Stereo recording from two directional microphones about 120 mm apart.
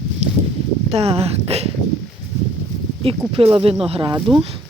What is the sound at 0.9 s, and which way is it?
Speech, 60° right (ahead or behind).